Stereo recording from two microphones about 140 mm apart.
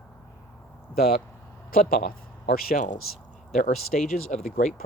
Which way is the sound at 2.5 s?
80° left.